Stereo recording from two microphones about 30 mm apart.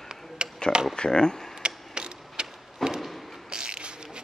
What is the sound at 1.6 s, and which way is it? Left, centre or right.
Mechanisms, right.